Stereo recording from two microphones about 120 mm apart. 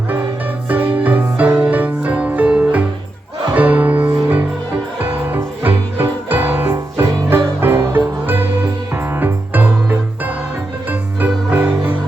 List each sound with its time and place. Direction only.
0.7 s music: 15° right (ahead or behind)